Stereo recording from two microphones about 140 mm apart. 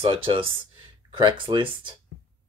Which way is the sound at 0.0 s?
40° right (ahead or behind).